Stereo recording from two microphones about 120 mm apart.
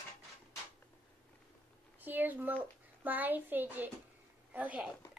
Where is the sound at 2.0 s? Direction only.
15° right (ahead or behind).